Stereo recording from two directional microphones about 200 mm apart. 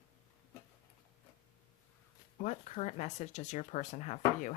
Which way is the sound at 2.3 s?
35° left (ahead or behind).